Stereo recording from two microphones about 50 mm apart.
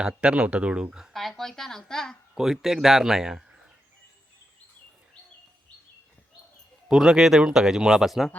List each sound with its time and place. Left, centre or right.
0.0 s speech: centre
1.1 s a woman's voice: centre
2.3 s speech: centre
6.8 s speech: centre